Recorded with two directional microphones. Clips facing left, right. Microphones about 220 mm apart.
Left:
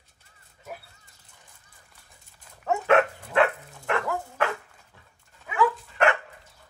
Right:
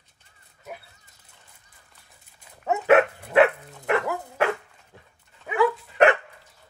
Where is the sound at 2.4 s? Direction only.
5° right (ahead or behind).